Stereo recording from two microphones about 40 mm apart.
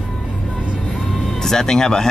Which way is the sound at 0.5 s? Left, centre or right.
Right.